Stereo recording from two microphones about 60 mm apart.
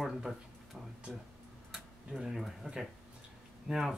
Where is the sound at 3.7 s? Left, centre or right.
Centre.